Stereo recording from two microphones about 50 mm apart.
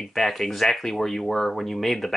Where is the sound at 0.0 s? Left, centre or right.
Centre.